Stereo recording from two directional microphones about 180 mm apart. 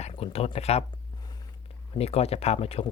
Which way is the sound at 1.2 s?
20° left (ahead or behind).